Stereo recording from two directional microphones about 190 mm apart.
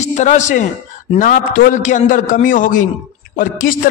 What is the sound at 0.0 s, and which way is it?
A man's voice, 40° left (ahead or behind).